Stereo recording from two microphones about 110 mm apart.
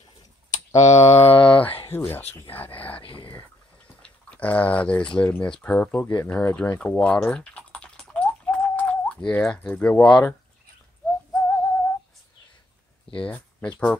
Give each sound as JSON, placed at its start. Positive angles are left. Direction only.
{"t": 0.7, "sound": "speech", "side_deg": 90}
{"t": 1.1, "sound": "speech", "side_deg": 15}
{"t": 2.9, "sound": "speech", "side_deg": 55}
{"t": 4.0, "sound": "speech", "side_deg": 15}
{"t": 7.2, "sound": "typing", "side_deg": 10}
{"t": 11.1, "sound": "whistling", "side_deg": 10}
{"t": 13.2, "sound": "speech", "side_deg": 10}